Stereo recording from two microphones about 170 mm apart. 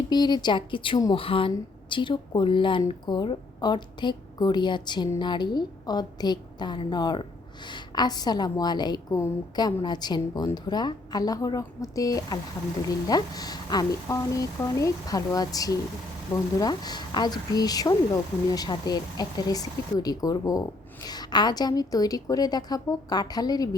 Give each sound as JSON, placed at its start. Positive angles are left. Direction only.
{"t": 0.1, "sound": "speech", "side_deg": 25}